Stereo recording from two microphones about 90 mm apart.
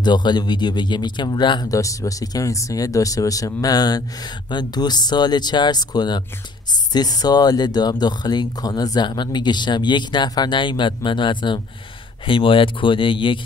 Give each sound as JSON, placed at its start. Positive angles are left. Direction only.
{"t": 0.0, "sound": "speech", "side_deg": 55}
{"t": 1.7, "sound": "speech", "side_deg": 40}
{"t": 12.3, "sound": "speech", "side_deg": 75}